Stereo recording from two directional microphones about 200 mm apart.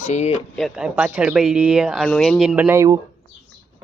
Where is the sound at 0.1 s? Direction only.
35° left (ahead or behind).